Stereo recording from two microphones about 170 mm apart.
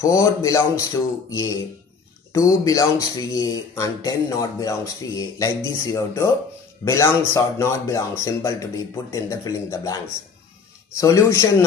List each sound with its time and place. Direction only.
0.0 s speech: 20° left (ahead or behind)